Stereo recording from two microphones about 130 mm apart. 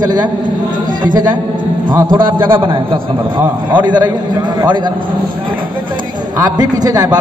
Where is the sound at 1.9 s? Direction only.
30° right (ahead or behind).